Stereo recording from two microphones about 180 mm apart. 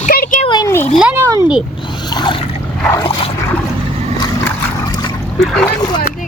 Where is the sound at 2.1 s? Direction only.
25° left (ahead or behind).